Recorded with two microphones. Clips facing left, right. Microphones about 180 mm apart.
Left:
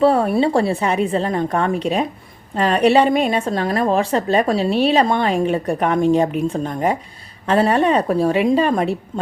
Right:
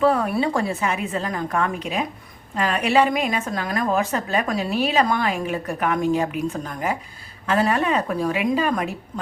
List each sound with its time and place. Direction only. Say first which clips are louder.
0.0 s a woman's voice: left 5 dB; 30° left (ahead or behind)